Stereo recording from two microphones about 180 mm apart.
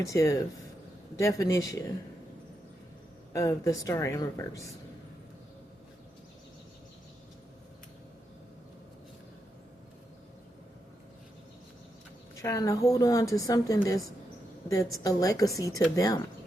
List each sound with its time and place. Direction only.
0.0 s a woman's voice: 15° left (ahead or behind)
3.3 s speech: 15° left (ahead or behind)
12.4 s a woman's voice: 20° left (ahead or behind)